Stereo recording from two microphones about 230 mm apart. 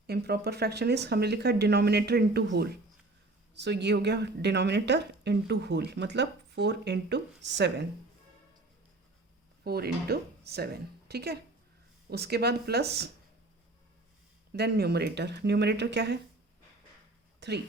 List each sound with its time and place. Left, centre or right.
0.1 s a woman's voice: right
9.6 s a woman's voice: right
14.5 s a woman's voice: right
17.4 s a woman's voice: right